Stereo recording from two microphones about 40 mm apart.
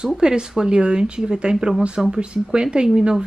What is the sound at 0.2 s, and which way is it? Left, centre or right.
Speech, centre.